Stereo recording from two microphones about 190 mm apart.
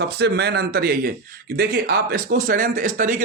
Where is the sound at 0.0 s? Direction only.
60° right (ahead or behind).